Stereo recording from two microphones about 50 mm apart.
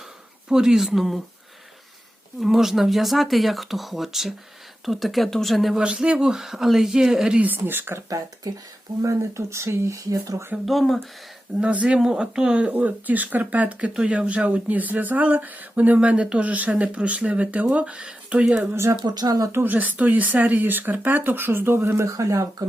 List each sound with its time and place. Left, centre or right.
0.4 s speech: centre
2.4 s speech: centre
5.7 s speech: centre
7.4 s speech: right
9.0 s speech: right
10.7 s speech: centre
11.6 s speech: right
11.9 s speech: centre
12.7 s speech: right
13.9 s speech: centre; by 16.0 s right
16.0 s speech: right
18.7 s speech: right
19.6 s speech: right